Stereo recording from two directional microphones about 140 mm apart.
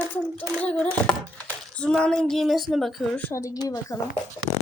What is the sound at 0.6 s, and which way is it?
A child's voice, 5° left (ahead or behind).